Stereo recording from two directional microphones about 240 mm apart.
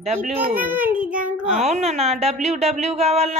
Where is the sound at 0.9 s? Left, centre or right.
Right.